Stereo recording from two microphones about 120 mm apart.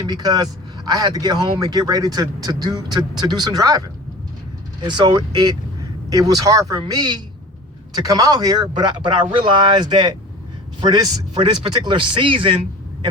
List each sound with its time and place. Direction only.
0.1 s a man's voice: 35° right (ahead or behind)